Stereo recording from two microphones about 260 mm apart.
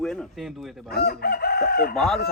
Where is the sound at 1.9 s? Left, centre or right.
Centre.